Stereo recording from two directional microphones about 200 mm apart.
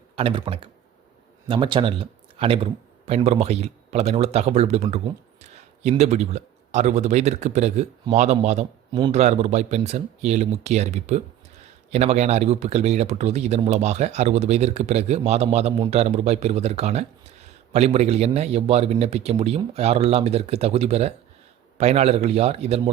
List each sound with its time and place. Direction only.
0.2 s speech: 25° right (ahead or behind)